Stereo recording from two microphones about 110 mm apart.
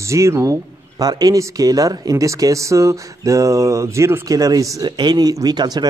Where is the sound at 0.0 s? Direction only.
25° right (ahead or behind).